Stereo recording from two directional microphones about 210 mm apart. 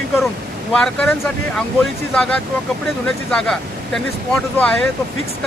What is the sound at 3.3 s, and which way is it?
Speech, centre (ahead or behind).